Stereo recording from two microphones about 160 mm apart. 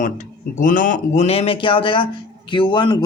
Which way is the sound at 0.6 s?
55° left (ahead or behind).